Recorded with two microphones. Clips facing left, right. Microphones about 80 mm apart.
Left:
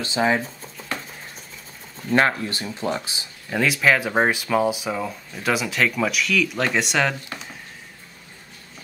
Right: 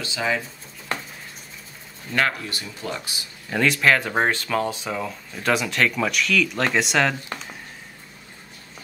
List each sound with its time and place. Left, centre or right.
0.0 s speech: left
2.1 s speech: left
3.4 s speech: centre